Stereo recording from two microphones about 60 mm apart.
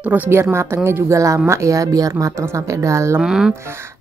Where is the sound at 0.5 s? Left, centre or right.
Right.